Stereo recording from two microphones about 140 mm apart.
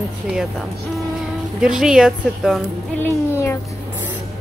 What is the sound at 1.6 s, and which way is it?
Speech, 5° right (ahead or behind).